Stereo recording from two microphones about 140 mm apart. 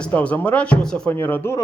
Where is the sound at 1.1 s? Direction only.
15° left (ahead or behind).